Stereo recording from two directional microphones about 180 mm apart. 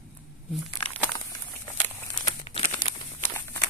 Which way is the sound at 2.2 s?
40° left (ahead or behind).